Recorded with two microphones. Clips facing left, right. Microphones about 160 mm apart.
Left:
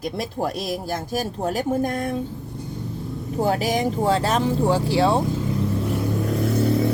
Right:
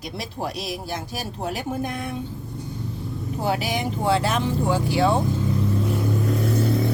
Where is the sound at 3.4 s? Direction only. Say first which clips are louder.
Left 4 dB; 40° left (ahead or behind).